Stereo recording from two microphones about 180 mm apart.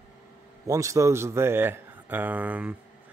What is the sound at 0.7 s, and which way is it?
Speech, 15° right (ahead or behind).